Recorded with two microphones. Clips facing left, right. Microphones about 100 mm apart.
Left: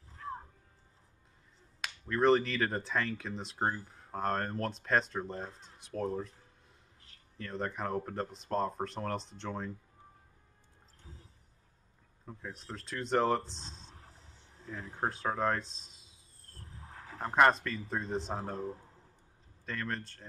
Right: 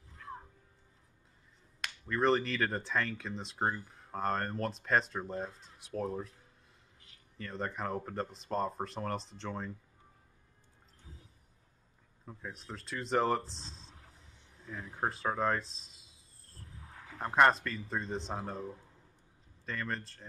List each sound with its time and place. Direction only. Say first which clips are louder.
1.8 s speech: left 2 dB; centre (ahead or behind)
7.3 s speech: left 1 dB; centre (ahead or behind)
12.3 s speech: left 1 dB; centre (ahead or behind)
14.0 s a sound: left 2 dB; 30° left (ahead or behind)
15.0 s a sound: even; centre (ahead or behind)
16.6 s wild animals: left 2 dB; 30° left (ahead or behind)
17.2 s speech: even; centre (ahead or behind)